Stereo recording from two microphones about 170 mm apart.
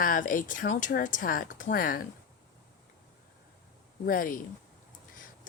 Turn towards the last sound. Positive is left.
turn(degrees=55)  # may be behind; listen again after turning